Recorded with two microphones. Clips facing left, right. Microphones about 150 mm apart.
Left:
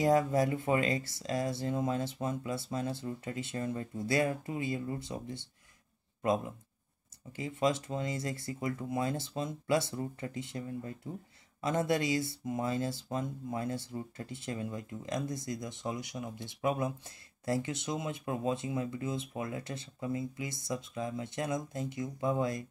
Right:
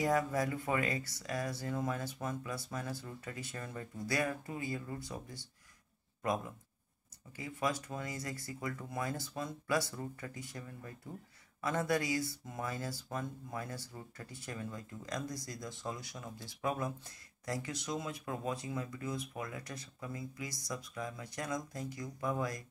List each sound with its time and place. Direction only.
0.0 s speech: 25° left (ahead or behind)